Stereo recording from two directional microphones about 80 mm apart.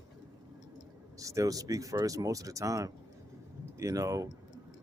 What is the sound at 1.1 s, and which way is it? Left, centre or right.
Speech, right.